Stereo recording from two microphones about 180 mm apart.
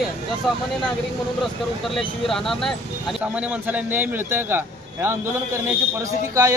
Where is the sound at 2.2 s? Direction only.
Centre (ahead or behind).